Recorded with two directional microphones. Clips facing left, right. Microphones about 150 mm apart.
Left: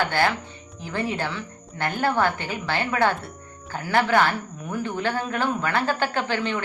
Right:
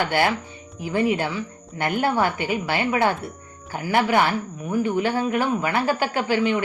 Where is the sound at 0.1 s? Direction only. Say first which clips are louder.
Right 2 dB; 15° right (ahead or behind).